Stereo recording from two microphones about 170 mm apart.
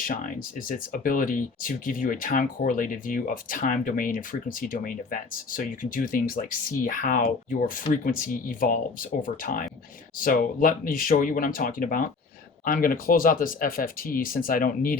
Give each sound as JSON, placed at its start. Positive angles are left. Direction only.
{"t": 0.0, "sound": "speech", "side_deg": 50}